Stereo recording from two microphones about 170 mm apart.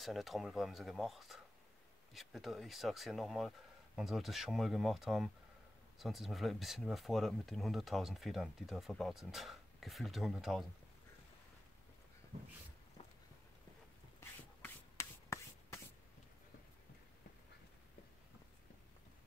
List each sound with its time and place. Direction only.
0.0 s speech: centre (ahead or behind)
14.6 s writing: 15° left (ahead or behind)